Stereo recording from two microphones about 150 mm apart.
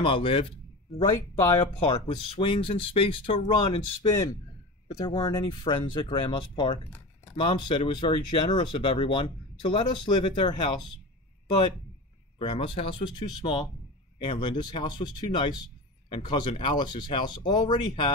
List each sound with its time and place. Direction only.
0.0 s a man's voice: 35° left (ahead or behind)
1.0 s speech: 20° left (ahead or behind)
1.9 s speech: 35° left (ahead or behind)
12.4 s speech: 35° left (ahead or behind)